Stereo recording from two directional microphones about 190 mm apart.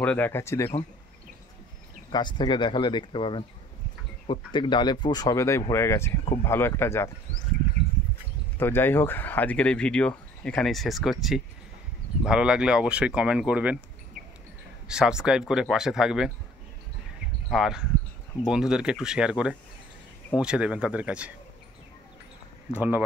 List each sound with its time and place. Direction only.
0.0 s speech: 10° left (ahead or behind)
2.0 s speech: 25° left (ahead or behind)
8.5 s speech: 10° left (ahead or behind); by 13.7 s 5° right (ahead or behind)
14.9 s speech: 5° right (ahead or behind)
17.5 s speech: centre (ahead or behind)
22.7 s speech: 10° right (ahead or behind)